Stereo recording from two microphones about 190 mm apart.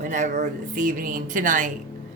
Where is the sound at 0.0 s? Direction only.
40° right (ahead or behind).